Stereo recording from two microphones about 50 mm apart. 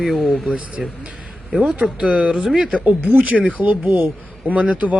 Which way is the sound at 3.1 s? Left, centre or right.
Right.